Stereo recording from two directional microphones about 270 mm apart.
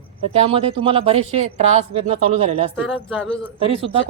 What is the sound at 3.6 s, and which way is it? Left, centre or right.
Speech, right.